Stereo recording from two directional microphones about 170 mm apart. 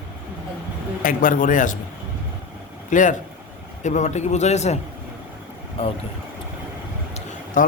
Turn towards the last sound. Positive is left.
turn(degrees=50)  # may be behind; listen again after turning